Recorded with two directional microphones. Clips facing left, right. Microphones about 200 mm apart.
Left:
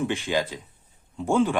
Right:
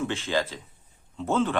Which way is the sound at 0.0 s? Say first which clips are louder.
Left 2 dB; 15° left (ahead or behind).